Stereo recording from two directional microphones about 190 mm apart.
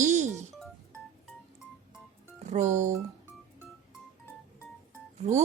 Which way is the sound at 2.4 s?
40° right (ahead or behind).